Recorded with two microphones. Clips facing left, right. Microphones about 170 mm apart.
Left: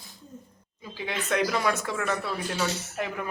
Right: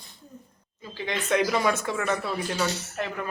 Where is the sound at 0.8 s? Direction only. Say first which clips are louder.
Right 2 dB; 10° left (ahead or behind).